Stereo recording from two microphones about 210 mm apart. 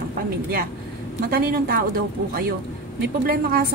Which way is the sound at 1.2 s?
45° right (ahead or behind).